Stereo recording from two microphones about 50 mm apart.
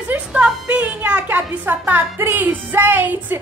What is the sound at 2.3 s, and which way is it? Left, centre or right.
Music, right.